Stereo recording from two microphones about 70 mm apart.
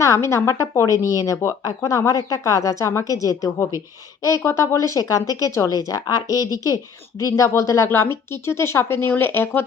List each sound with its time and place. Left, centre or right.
0.0 s a woman's voice: left
7.9 s speech: left